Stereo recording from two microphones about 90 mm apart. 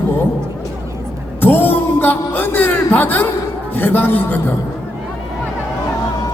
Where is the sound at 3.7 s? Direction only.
20° left (ahead or behind).